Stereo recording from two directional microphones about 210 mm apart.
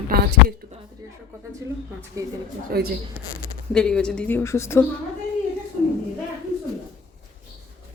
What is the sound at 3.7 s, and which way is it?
A woman's voice, 5° left (ahead or behind).